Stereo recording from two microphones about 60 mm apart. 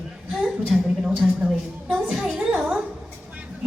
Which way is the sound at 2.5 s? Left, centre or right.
Right.